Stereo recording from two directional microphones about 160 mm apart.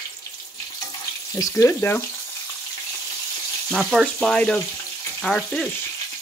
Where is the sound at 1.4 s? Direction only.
20° left (ahead or behind).